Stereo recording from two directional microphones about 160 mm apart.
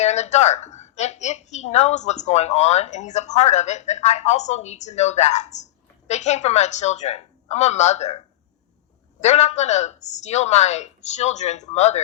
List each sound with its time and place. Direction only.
0.0 s a woman's voice: 45° left (ahead or behind)
9.2 s a woman's voice: 45° left (ahead or behind)